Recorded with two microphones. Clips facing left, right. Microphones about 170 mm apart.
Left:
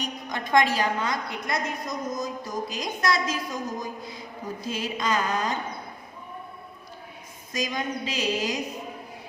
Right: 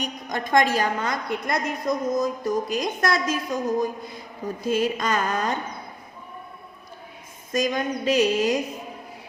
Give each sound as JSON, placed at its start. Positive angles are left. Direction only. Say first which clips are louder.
{"t": 0.0, "sound": "a woman's voice", "louder": "right 3 dB", "side_deg": -45}
{"t": 7.5, "sound": "a woman's voice", "louder": "right 5 dB", "side_deg": -55}